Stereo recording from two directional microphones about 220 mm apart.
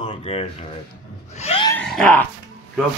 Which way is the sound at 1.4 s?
25° left (ahead or behind).